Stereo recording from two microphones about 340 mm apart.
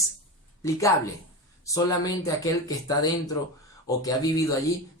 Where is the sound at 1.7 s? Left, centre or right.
Centre.